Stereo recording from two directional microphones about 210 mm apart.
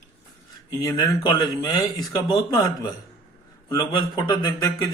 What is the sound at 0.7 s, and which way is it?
Speech, 20° left (ahead or behind).